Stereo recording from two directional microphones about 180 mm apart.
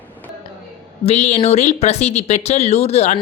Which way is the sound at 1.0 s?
35° left (ahead or behind).